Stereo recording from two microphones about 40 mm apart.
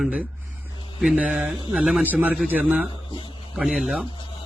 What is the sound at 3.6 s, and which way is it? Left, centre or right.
Speech, centre.